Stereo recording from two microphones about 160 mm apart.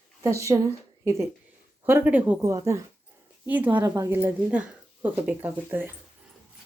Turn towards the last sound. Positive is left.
turn(degrees=-10)  # may be behind; listen again after turning